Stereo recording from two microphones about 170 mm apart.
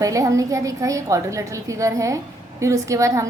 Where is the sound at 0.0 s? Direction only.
20° right (ahead or behind).